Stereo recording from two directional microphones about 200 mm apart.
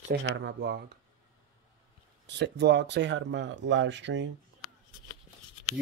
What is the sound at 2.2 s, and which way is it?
Speech, 60° right (ahead or behind).